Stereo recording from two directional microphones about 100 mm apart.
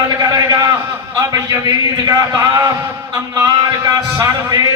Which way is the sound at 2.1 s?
35° right (ahead or behind).